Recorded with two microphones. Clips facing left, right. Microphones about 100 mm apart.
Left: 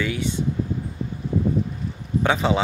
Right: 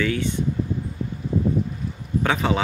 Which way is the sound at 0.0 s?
15° left (ahead or behind).